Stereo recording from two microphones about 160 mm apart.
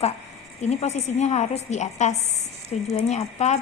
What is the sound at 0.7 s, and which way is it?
A woman's voice, 40° left (ahead or behind).